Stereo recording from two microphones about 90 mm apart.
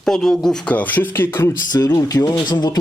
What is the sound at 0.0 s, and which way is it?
Speech, 5° left (ahead or behind).